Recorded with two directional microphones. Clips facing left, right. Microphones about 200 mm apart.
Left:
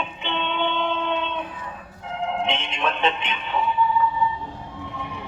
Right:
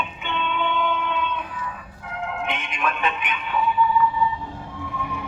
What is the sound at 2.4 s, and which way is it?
Music, 25° left (ahead or behind).